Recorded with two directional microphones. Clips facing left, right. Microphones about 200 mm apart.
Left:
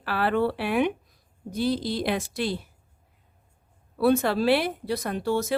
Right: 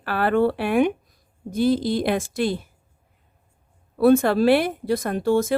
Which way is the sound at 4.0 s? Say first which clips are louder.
Right 5 dB; 50° right (ahead or behind).